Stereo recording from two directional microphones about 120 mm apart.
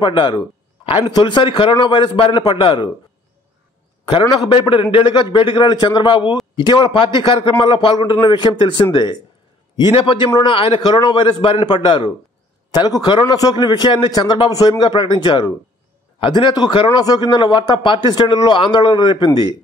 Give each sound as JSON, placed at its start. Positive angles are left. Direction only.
{"t": 0.0, "sound": "a man's voice", "side_deg": 40}
{"t": 4.3, "sound": "a man's voice", "side_deg": 50}